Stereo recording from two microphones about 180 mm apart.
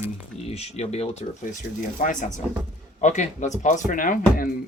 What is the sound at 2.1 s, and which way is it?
Speech, 45° left (ahead or behind).